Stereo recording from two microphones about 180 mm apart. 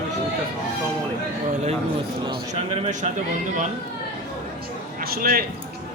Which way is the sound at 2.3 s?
35° right (ahead or behind).